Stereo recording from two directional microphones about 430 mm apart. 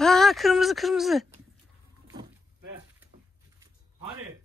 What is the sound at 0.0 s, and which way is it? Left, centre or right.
Speech, centre.